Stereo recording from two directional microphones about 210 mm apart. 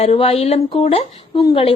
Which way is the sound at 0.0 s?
30° left (ahead or behind).